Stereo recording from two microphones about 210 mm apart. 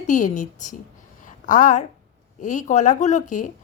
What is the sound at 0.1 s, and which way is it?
A woman's voice, 35° left (ahead or behind).